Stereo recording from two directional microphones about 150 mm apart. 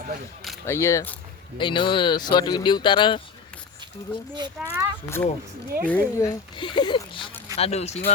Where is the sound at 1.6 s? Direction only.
30° left (ahead or behind).